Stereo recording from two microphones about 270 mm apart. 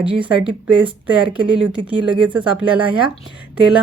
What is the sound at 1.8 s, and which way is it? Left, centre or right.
Speech, centre.